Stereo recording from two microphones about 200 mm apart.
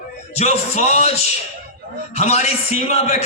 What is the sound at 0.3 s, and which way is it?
A man's voice, 35° left (ahead or behind).